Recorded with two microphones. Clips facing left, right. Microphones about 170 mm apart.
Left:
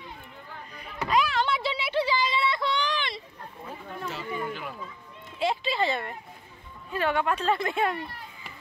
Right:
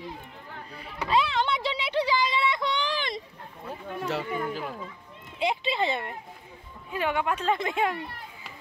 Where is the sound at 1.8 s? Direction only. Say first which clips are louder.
Right 2 dB; 15° right (ahead or behind).